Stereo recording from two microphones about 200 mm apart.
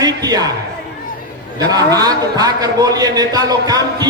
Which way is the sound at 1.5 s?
20° right (ahead or behind).